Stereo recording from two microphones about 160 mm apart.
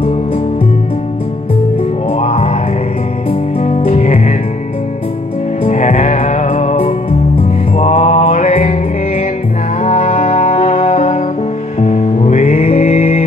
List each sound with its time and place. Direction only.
2.1 s music: 40° left (ahead or behind)
5.6 s music: 45° left (ahead or behind)
7.7 s mantra: 45° left (ahead or behind)
9.8 s music: 45° left (ahead or behind)